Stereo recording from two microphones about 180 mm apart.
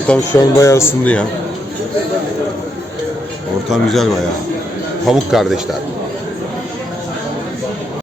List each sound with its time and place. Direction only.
0.3 s speech: 20° left (ahead or behind)
3.7 s speech: centre (ahead or behind)